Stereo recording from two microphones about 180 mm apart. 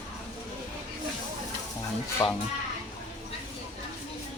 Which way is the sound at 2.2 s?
20° left (ahead or behind).